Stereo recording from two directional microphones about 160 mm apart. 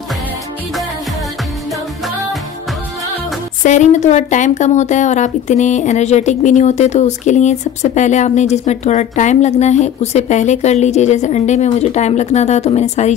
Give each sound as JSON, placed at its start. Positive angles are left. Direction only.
{"t": 3.6, "sound": "a woman's voice", "side_deg": 50}